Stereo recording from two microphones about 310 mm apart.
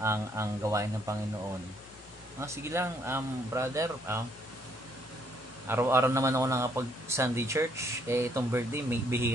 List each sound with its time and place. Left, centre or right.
0.0 s a man's voice: centre
2.4 s a man's voice: centre
5.7 s a man's voice: centre